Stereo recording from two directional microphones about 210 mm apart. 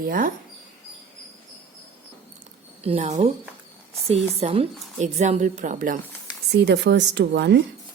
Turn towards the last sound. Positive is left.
turn(degrees=-55)  # may be behind; listen again after turning